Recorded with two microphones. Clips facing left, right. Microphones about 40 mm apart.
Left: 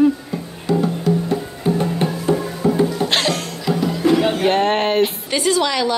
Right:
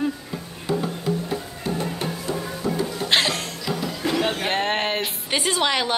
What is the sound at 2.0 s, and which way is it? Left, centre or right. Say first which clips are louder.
Music: left 8 dB; left.